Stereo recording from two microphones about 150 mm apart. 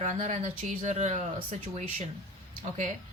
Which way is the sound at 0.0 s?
55° right (ahead or behind).